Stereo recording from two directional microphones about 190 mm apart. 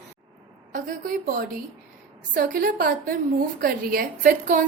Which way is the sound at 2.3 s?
50° right (ahead or behind).